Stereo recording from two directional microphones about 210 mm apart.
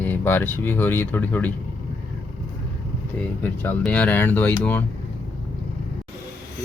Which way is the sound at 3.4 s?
5° left (ahead or behind).